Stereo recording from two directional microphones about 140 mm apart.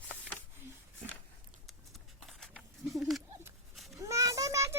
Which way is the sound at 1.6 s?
Centre (ahead or behind).